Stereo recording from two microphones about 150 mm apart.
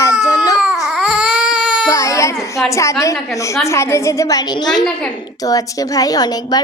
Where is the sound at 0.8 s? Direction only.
5° right (ahead or behind).